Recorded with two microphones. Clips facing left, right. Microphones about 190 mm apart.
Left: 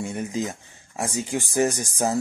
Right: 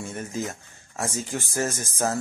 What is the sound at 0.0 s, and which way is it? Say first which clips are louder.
Speech: left 4 dB; 15° left (ahead or behind).